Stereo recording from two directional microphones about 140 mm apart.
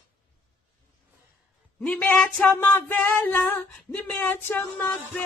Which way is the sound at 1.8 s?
5° left (ahead or behind).